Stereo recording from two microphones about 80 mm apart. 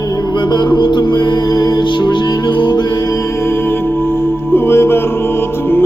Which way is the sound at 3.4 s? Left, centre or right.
Left.